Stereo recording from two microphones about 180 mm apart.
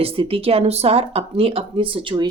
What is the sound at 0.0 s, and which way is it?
Speech, 30° right (ahead or behind).